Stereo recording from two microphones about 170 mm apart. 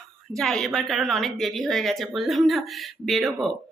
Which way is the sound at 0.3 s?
Centre (ahead or behind).